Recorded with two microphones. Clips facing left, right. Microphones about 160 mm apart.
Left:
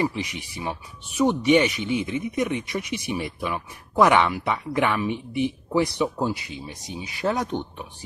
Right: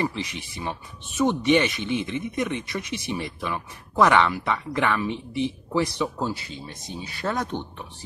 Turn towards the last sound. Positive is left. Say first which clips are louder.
# left 2 dB
turn(degrees=15)  # may be behind; listen again after turning